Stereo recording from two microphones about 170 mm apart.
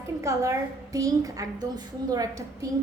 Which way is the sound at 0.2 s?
15° right (ahead or behind).